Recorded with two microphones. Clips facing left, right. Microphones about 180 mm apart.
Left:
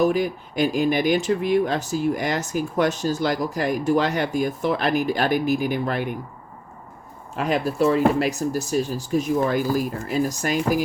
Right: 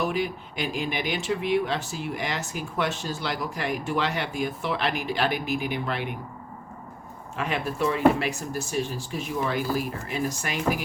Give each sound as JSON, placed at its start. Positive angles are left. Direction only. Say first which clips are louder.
{"t": 0.0, "sound": "speech", "louder": "left 7 dB", "side_deg": 40}
{"t": 7.3, "sound": "speech", "louder": "left 6 dB", "side_deg": 40}